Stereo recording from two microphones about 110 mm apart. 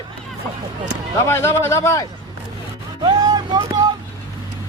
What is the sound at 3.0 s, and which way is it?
Speech, 35° right (ahead or behind).